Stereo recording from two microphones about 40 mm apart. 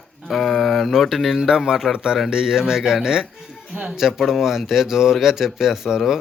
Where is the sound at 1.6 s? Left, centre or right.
Centre.